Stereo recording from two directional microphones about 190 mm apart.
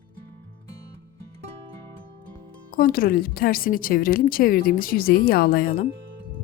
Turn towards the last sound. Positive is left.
turn(degrees=50)  # may be behind; listen again after turning